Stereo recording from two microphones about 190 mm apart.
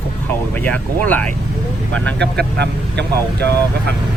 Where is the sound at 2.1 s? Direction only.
65° right (ahead or behind).